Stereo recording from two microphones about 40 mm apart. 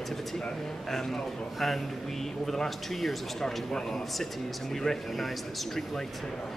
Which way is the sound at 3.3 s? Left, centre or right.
Centre.